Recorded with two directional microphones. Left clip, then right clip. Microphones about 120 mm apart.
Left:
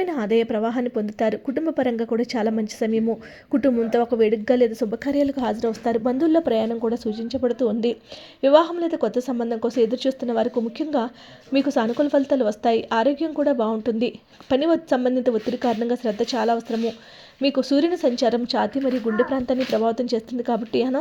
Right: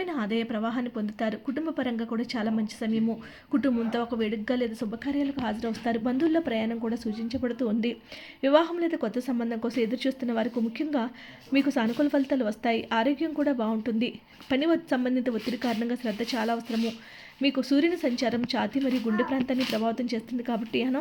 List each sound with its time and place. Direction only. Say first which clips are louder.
0.0 s a woman's voice: left 9 dB; 55° left (ahead or behind)
3.5 s a woman's voice: left 8 dB; 45° left (ahead or behind)
5.6 s a woman's voice: left 8 dB; 25° left (ahead or behind); by 19.4 s 10° left (ahead or behind)
19.7 s speech: left 8 dB; 20° left (ahead or behind)